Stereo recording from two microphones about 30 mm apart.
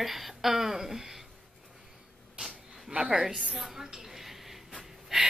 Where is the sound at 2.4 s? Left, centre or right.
Right.